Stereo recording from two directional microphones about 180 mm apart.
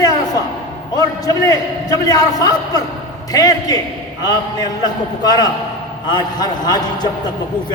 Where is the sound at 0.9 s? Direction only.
20° left (ahead or behind).